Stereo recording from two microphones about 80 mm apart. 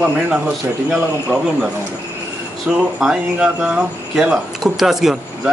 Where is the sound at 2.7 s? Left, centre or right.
Centre.